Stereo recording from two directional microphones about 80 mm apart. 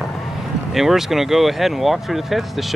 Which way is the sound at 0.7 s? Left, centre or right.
Centre.